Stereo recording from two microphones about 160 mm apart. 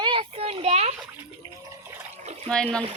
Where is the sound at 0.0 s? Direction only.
35° right (ahead or behind).